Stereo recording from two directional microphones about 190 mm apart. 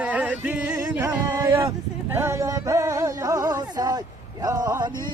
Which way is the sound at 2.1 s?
15° right (ahead or behind).